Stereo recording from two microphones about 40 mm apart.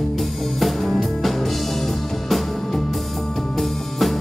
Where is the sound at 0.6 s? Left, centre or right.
Centre.